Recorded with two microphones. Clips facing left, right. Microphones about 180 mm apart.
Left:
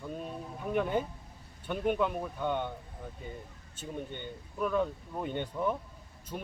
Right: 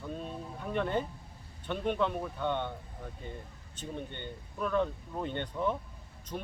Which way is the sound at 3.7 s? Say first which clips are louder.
Left 1 dB; 10° left (ahead or behind).